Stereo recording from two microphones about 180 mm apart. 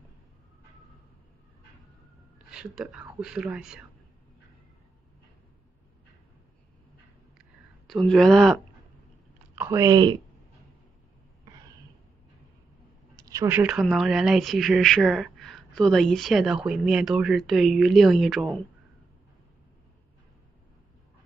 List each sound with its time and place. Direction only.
2.5 s speech: 5° right (ahead or behind)
7.3 s a sound: centre (ahead or behind)
8.1 s speech: centre (ahead or behind)
9.6 s speech: 15° right (ahead or behind)
13.1 s speech: 20° right (ahead or behind); by 18.6 s centre (ahead or behind)